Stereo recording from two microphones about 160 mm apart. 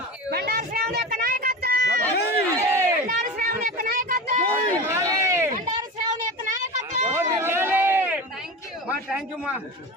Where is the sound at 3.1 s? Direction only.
65° right (ahead or behind).